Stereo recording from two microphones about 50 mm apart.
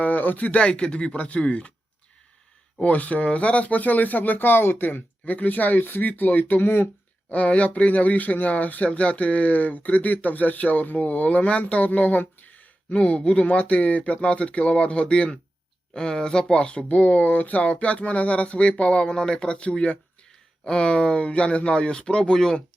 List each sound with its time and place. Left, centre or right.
0.0 s speech: left
2.8 s speech: left
13.0 s speech: left